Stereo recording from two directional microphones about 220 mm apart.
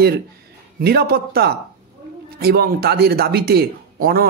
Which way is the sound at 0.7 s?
45° right (ahead or behind).